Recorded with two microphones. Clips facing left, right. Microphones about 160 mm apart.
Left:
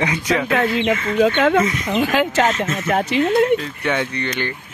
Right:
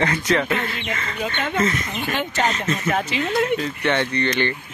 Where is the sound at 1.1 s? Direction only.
90° left.